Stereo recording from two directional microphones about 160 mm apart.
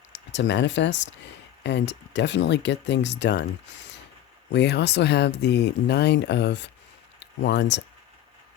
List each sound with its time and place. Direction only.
0.1 s speech: 90° left
4.5 s speech: 90° left